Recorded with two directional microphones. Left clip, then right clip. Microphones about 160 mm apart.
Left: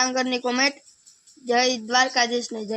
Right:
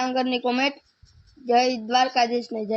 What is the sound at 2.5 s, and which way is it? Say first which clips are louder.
Speech: right 3 dB; 20° right (ahead or behind).